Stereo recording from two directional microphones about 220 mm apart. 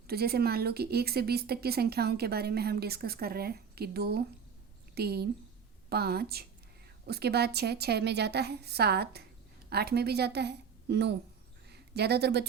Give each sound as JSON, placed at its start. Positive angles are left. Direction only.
{"t": 0.1, "sound": "a woman's voice", "side_deg": -45}